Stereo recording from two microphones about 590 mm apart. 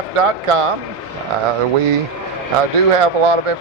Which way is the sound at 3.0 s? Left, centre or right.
Right.